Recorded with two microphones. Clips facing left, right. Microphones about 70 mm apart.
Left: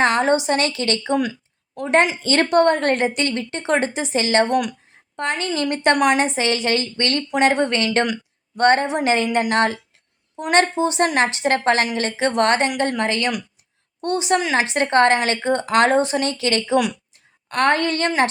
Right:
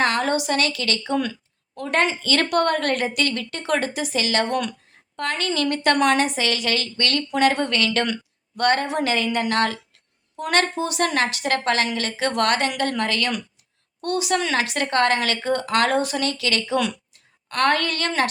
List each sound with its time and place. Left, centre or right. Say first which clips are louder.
0.0 s a woman's voice: left 4 dB; left